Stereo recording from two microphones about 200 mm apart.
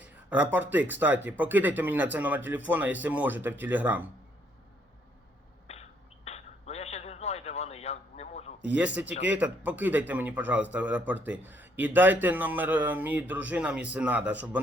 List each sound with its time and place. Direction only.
0.0 s speech: 10° right (ahead or behind)
5.7 s a sound: 35° left (ahead or behind)
8.6 s speech: 5° right (ahead or behind)